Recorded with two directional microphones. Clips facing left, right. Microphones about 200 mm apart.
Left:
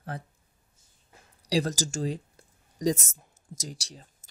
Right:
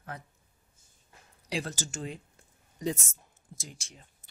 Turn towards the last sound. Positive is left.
turn(degrees=35)  # may be behind; listen again after turning